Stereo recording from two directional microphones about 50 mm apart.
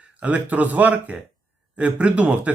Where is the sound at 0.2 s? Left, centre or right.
Right.